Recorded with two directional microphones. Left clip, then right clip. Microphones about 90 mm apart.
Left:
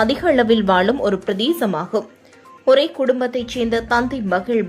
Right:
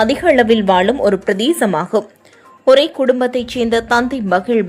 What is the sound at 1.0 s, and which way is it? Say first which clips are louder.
A woman's voice: right 5 dB; 30° right (ahead or behind).